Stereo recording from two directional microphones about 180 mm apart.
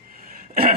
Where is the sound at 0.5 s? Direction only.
55° right (ahead or behind).